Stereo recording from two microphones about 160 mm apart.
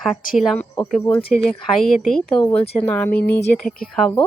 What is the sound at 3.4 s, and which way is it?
Speech, 90° left.